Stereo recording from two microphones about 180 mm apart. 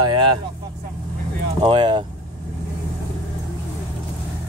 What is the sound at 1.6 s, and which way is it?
Speech, 30° right (ahead or behind).